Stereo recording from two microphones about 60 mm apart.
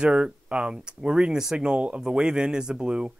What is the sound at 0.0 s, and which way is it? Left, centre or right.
Speech, centre.